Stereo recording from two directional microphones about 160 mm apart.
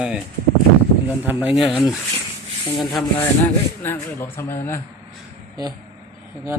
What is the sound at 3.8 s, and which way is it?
Speech, 15° left (ahead or behind).